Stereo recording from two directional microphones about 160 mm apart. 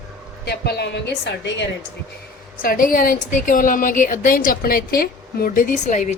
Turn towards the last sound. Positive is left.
turn(degrees=50)  # may be behind; listen again after turning